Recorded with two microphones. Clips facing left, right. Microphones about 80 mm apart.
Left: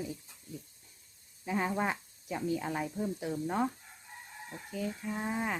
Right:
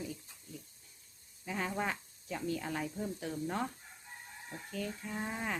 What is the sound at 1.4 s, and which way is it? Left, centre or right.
Speech, centre.